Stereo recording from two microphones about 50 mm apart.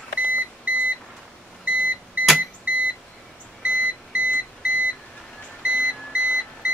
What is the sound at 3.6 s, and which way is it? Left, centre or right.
Alarm clock, right.